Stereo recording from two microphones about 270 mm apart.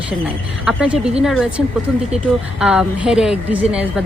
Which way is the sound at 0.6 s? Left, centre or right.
Centre.